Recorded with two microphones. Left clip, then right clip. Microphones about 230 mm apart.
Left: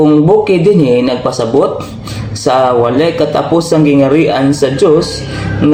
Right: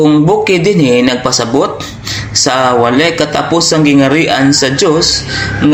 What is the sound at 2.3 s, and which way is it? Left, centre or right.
A man's voice, centre.